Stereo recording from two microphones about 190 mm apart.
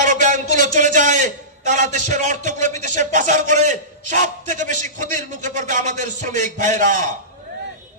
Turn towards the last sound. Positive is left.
turn(degrees=-40)  # may be behind; listen again after turning